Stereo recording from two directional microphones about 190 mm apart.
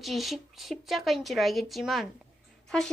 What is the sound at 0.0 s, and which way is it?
A woman's voice, centre (ahead or behind).